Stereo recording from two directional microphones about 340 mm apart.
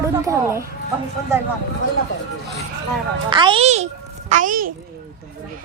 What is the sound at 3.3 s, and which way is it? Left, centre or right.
A child's voice, centre.